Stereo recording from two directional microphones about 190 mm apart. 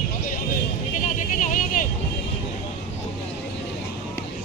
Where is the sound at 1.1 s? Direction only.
40° left (ahead or behind).